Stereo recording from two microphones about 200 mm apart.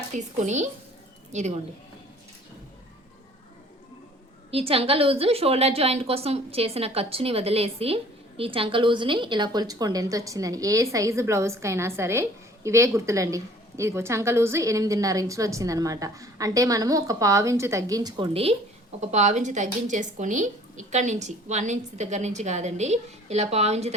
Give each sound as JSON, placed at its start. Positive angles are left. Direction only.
{"t": 0.1, "sound": "speech", "side_deg": -35}
{"t": 4.5, "sound": "a woman's voice", "side_deg": -30}
{"t": 18.9, "sound": "speech", "side_deg": -35}